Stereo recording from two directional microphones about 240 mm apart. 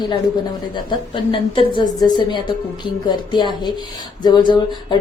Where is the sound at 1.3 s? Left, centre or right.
Left.